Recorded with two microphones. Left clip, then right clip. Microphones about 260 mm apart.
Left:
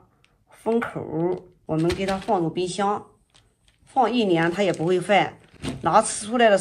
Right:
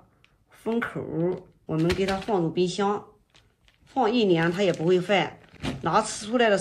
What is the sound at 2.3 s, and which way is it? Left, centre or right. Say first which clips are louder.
Speech: left 1 dB; left.